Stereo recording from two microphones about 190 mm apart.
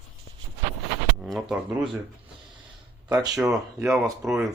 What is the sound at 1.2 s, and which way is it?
Speech, centre (ahead or behind).